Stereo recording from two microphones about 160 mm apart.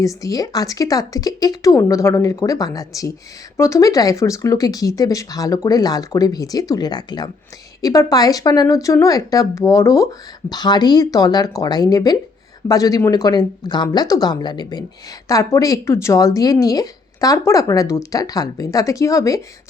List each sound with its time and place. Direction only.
0.0 s speech: 20° left (ahead or behind)